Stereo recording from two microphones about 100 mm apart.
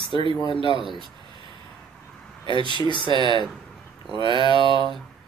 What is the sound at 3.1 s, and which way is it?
Speech, 50° right (ahead or behind).